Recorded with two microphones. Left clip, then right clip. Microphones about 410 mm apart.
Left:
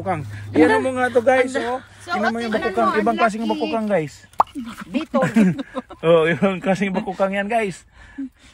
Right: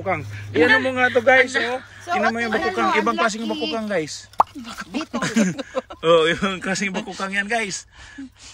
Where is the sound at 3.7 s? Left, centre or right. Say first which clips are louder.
Left 3 dB; centre.